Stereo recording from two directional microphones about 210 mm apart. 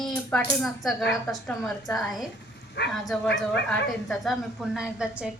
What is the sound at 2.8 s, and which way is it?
Speech, 50° left (ahead or behind).